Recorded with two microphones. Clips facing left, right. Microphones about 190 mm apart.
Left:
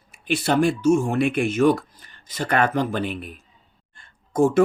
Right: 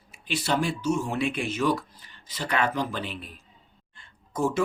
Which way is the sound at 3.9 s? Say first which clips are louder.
Left 10 dB; 50° left (ahead or behind).